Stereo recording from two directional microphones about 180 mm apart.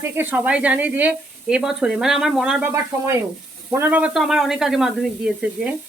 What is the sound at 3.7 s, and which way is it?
Speech, 10° right (ahead or behind).